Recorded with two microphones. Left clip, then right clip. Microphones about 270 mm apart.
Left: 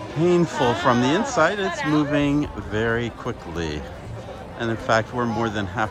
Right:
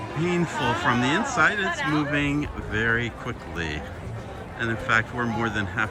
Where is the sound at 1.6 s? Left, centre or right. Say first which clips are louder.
Left 2 dB; left.